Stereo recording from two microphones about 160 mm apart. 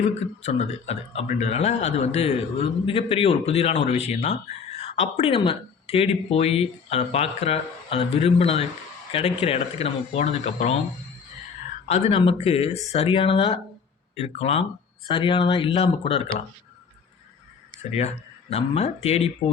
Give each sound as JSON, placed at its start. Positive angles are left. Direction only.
{"t": 0.1, "sound": "speech", "side_deg": 45}
{"t": 11.9, "sound": "speech", "side_deg": 45}
{"t": 18.5, "sound": "speech", "side_deg": 40}